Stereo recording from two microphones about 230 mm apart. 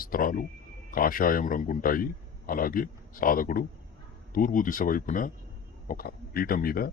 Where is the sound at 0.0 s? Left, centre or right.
Left.